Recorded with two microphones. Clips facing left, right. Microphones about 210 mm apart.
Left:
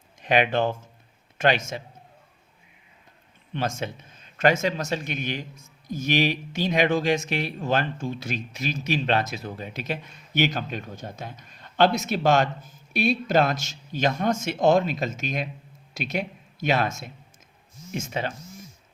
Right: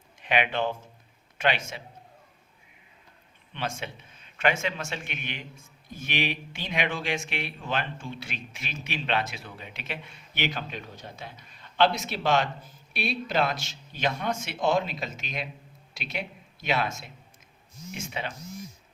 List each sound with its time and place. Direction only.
0.2 s speech: 40° left (ahead or behind)
3.5 s a man's voice: 45° left (ahead or behind)